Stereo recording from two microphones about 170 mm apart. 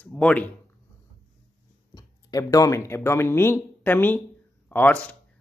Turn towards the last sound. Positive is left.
turn(degrees=5)  # may be behind; listen again after turning